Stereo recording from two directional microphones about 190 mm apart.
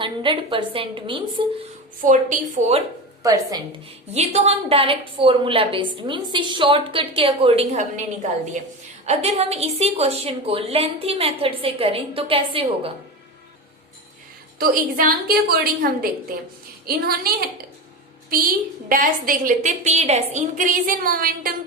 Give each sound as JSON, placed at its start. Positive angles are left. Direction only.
{"t": 0.0, "sound": "a woman's voice", "side_deg": -25}
{"t": 2.0, "sound": "a woman's voice", "side_deg": -40}
{"t": 4.1, "sound": "a woman's voice", "side_deg": -35}
{"t": 14.6, "sound": "a woman's voice", "side_deg": -50}
{"t": 18.9, "sound": "a woman's voice", "side_deg": -45}